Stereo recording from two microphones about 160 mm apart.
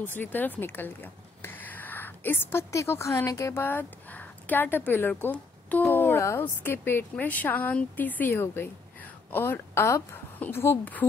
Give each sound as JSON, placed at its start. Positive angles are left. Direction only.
{"t": 0.0, "sound": "speech", "side_deg": 10}